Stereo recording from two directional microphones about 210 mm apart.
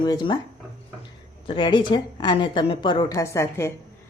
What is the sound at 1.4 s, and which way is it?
A woman's voice, 25° left (ahead or behind).